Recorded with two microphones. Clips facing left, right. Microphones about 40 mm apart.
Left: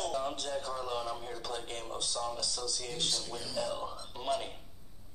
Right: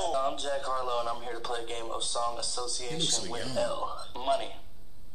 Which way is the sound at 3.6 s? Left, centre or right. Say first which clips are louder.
Right 5 dB; right.